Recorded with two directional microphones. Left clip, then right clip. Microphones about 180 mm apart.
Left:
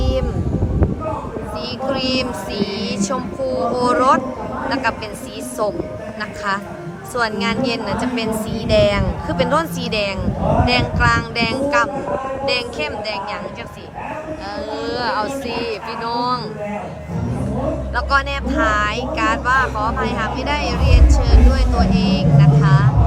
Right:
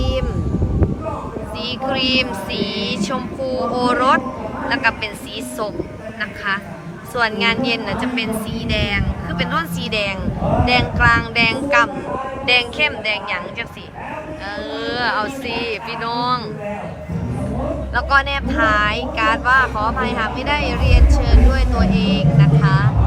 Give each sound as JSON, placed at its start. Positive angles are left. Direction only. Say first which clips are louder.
{"t": 0.0, "sound": "a sound", "louder": "left 1 dB", "side_deg": 0}
{"t": 1.9, "sound": "a sound", "louder": "right 2 dB", "side_deg": 15}
{"t": 4.7, "sound": "a woman's voice", "louder": "right 3 dB", "side_deg": 15}
{"t": 7.2, "sound": "a woman's voice", "louder": "right 2 dB", "side_deg": 10}
{"t": 14.8, "sound": "a woman's voice", "louder": "right 1 dB", "side_deg": 10}
{"t": 17.9, "sound": "speech", "louder": "right 3 dB", "side_deg": 10}